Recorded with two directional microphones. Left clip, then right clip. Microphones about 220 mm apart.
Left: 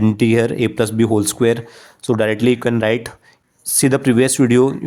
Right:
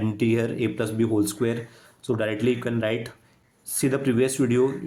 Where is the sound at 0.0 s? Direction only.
45° left (ahead or behind).